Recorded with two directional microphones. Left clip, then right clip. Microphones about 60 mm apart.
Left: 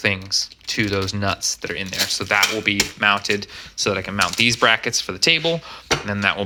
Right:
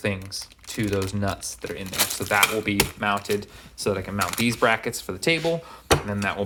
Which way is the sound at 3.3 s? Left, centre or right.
Right.